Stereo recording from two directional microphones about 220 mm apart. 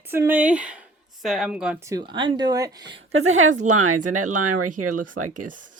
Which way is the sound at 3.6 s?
85° right.